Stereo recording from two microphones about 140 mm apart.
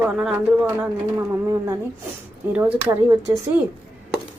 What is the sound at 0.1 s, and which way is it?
Speech, 5° right (ahead or behind).